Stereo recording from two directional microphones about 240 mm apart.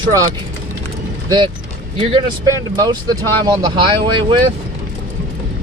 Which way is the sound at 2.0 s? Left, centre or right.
Right.